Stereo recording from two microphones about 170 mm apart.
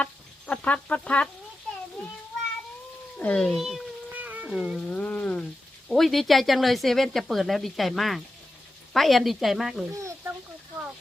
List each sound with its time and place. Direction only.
0.0 s chicken: 10° left (ahead or behind)
3.2 s a sound: 5° left (ahead or behind); by 4.5 s 10° right (ahead or behind)
4.5 s speech: 5° right (ahead or behind)
4.9 s frying: 5° left (ahead or behind)
5.9 s speech: centre (ahead or behind)
9.9 s a sound: 15° right (ahead or behind)